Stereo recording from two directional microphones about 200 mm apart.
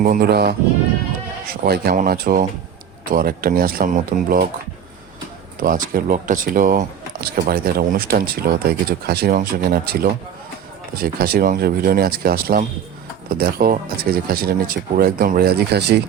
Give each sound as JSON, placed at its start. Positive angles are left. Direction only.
{"t": 0.0, "sound": "speech", "side_deg": -45}
{"t": 1.6, "sound": "speech", "side_deg": -50}
{"t": 5.5, "sound": "speech", "side_deg": -45}